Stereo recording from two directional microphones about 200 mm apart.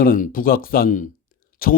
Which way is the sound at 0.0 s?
45° left (ahead or behind).